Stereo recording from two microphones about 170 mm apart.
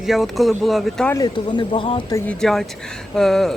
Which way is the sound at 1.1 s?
25° left (ahead or behind).